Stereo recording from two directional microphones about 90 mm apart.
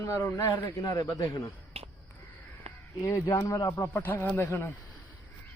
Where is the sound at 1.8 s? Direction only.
90° right.